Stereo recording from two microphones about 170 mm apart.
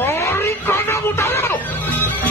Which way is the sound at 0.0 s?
15° left (ahead or behind).